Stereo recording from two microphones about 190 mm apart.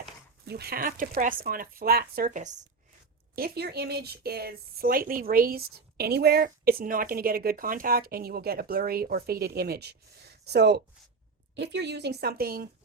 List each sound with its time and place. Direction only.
0.4 s speech: 60° right (ahead or behind); by 2.6 s 40° right (ahead or behind)
3.3 s speech: 55° right (ahead or behind)